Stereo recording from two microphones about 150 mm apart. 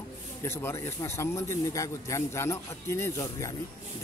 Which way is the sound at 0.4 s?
15° left (ahead or behind).